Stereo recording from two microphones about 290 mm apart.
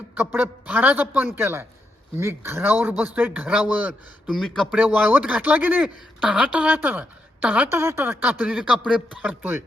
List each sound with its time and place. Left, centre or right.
0.1 s speech: centre